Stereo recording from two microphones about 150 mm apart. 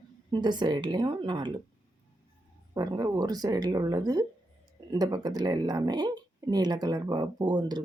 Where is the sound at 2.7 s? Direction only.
25° right (ahead or behind).